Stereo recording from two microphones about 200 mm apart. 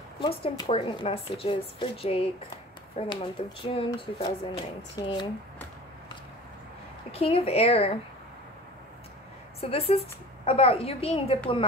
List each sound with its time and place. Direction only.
0.2 s speech: 25° left (ahead or behind)
7.1 s speech: 30° left (ahead or behind)
9.6 s speech: 30° left (ahead or behind)